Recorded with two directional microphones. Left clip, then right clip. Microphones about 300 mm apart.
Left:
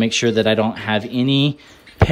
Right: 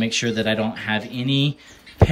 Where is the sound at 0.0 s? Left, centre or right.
Centre.